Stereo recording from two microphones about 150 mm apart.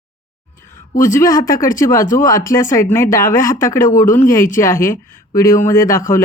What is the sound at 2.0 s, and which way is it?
Speech, 60° left (ahead or behind).